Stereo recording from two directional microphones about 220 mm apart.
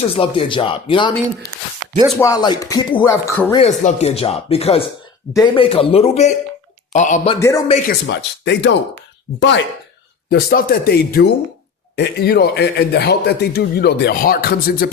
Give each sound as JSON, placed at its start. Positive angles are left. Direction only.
{"t": 0.2, "sound": "speech", "side_deg": 25}
{"t": 2.0, "sound": "speech", "side_deg": 10}
{"t": 3.6, "sound": "speech", "side_deg": 30}
{"t": 7.3, "sound": "speech", "side_deg": 10}
{"t": 7.9, "sound": "a man's voice", "side_deg": 50}